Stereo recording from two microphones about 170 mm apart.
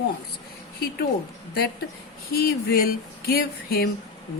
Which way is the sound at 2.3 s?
60° left (ahead or behind).